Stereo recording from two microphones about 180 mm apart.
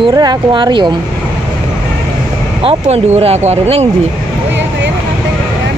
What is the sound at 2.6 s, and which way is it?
Speech, 35° right (ahead or behind).